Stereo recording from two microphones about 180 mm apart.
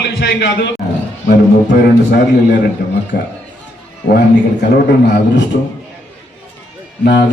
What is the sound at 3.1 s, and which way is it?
Speech, 50° left (ahead or behind).